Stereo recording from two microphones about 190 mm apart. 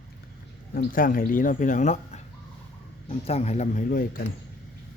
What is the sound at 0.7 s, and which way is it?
Speech, 45° left (ahead or behind).